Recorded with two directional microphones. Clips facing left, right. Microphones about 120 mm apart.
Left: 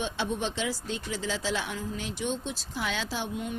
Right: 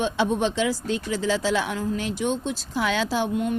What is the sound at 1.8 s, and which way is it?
Speech, 65° right (ahead or behind).